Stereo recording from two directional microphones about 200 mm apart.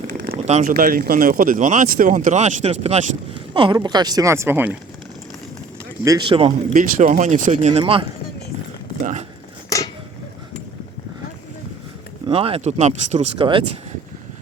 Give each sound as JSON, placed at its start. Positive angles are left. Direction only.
{"t": 0.1, "sound": "a sound", "side_deg": -45}
{"t": 0.6, "sound": "speech", "side_deg": -45}
{"t": 6.1, "sound": "speech", "side_deg": -25}
{"t": 6.7, "sound": "speech", "side_deg": -40}
{"t": 9.6, "sound": "a sound", "side_deg": 15}
{"t": 12.3, "sound": "speech", "side_deg": -30}